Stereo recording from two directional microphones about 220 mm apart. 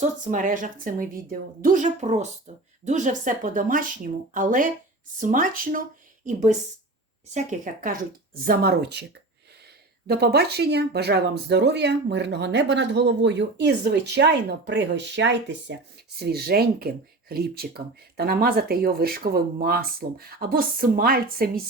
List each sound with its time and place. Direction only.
0.0 s a woman's voice: 35° right (ahead or behind)
10.1 s speech: 45° right (ahead or behind)